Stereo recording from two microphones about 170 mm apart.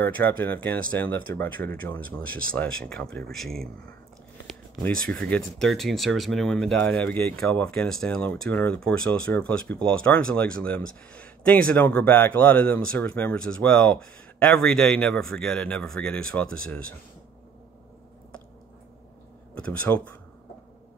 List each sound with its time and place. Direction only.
0.0 s speech: 10° left (ahead or behind)